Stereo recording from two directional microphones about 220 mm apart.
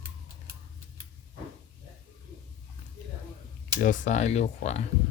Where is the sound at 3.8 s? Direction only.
35° left (ahead or behind).